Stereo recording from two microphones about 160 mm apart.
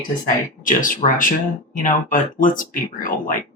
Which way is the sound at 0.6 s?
55° left (ahead or behind).